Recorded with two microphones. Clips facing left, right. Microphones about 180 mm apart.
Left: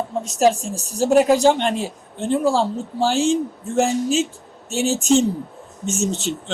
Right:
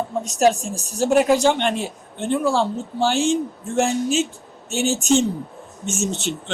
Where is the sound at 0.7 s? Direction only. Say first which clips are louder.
Left 2 dB; 35° left (ahead or behind).